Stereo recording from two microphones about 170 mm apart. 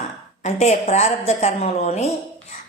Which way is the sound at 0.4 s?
40° left (ahead or behind).